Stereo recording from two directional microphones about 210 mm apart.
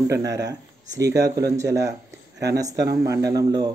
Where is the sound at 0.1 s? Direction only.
15° right (ahead or behind).